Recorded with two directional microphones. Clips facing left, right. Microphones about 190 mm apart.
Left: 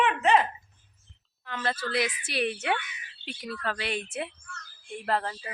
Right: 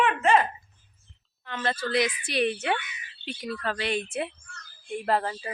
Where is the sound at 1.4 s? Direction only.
5° left (ahead or behind).